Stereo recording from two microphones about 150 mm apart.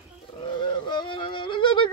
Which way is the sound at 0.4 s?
30° left (ahead or behind).